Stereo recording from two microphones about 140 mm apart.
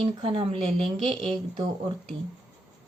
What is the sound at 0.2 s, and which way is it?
Speech, 40° right (ahead or behind).